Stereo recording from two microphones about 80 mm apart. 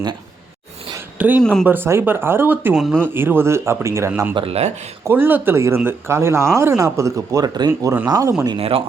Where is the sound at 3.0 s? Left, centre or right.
Right.